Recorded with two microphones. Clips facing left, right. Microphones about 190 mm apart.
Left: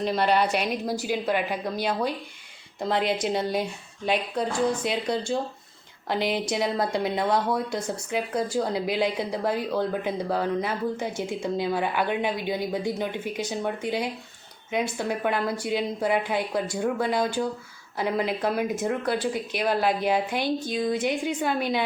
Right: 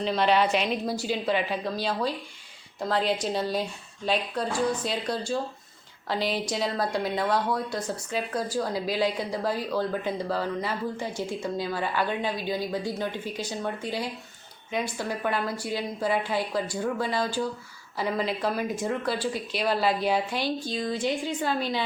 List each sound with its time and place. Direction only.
0.1 s a woman's voice: 10° left (ahead or behind)
7.9 s a woman's voice: 10° left (ahead or behind)
8.4 s a woman's voice: 20° left (ahead or behind)
16.8 s a woman's voice: 15° left (ahead or behind)